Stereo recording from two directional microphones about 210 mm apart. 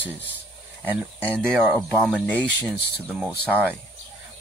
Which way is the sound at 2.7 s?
50° left (ahead or behind).